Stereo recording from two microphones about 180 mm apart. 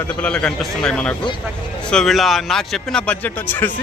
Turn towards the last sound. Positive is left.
turn(degrees=10)  # may be behind; listen again after turning